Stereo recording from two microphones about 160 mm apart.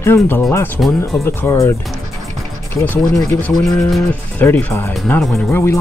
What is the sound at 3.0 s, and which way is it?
Speech, 25° left (ahead or behind).